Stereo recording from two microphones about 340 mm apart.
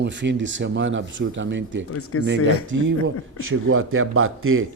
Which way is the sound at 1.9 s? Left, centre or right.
Left.